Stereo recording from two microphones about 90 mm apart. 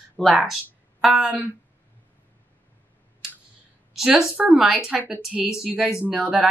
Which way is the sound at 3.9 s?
5° right (ahead or behind).